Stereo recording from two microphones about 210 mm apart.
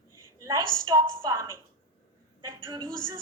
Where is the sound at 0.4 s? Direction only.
15° right (ahead or behind).